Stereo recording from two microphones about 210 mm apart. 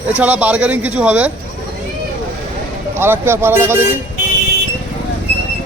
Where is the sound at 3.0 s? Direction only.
10° right (ahead or behind).